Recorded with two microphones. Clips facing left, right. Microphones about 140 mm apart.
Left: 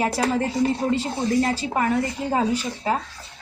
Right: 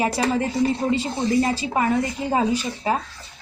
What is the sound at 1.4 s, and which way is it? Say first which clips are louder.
Speech: right 1 dB; 15° right (ahead or behind).